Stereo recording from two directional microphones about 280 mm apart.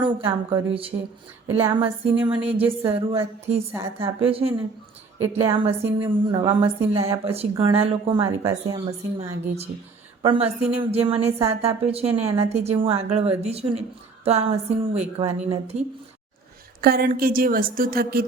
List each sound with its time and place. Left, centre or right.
0.0 s a woman's voice: centre
2.4 s a woman's voice: centre
3.1 s a woman's voice: right
16.8 s a woman's voice: right